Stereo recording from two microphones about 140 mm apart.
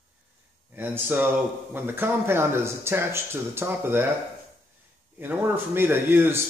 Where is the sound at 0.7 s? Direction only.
15° right (ahead or behind).